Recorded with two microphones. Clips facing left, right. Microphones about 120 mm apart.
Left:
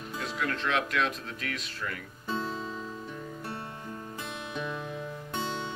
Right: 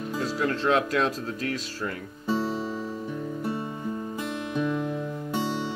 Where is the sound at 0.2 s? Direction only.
35° right (ahead or behind).